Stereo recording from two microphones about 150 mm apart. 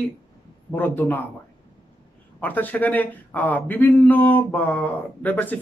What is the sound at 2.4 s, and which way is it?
A man's voice, 10° left (ahead or behind).